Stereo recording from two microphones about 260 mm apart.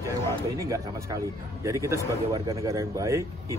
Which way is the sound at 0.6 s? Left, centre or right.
Centre.